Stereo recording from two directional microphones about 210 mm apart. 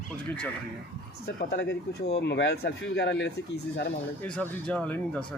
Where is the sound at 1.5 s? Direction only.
50° left (ahead or behind).